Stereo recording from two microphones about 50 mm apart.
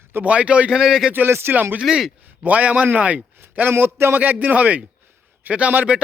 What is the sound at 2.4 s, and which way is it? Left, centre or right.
Speech, right.